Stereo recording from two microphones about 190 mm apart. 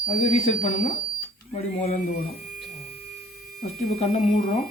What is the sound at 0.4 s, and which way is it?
Speech, 40° left (ahead or behind).